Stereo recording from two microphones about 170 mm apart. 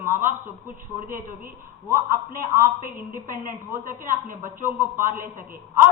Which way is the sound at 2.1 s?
55° right (ahead or behind).